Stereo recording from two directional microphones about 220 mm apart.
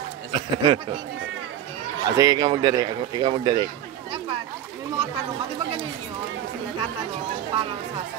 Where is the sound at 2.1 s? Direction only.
15° right (ahead or behind).